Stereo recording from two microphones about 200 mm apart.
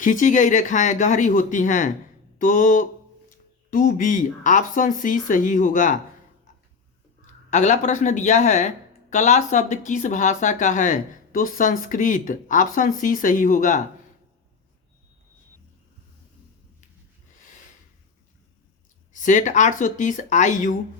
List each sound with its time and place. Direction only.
0.0 s speech: 40° left (ahead or behind)
7.5 s speech: 35° left (ahead or behind)
19.1 s speech: 40° left (ahead or behind)